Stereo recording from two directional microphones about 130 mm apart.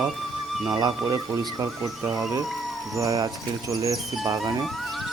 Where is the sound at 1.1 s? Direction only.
25° right (ahead or behind).